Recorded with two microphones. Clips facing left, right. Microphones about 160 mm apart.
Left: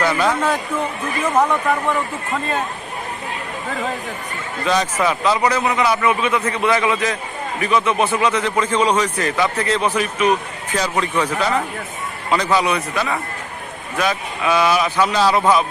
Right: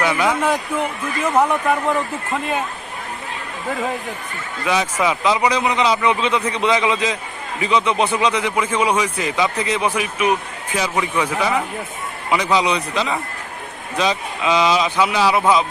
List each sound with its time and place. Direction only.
0.0 s a man's voice: 10° right (ahead or behind)
4.6 s a man's voice: 10° right (ahead or behind)